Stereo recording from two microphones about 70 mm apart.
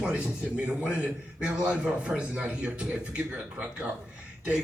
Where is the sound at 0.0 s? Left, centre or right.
Centre.